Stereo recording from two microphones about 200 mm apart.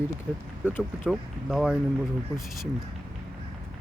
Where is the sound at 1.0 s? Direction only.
5° right (ahead or behind).